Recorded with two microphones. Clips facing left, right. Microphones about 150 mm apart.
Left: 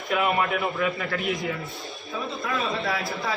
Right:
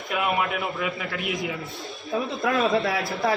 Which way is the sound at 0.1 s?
Centre (ahead or behind).